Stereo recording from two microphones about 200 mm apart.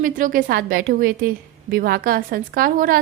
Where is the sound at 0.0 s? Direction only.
45° right (ahead or behind).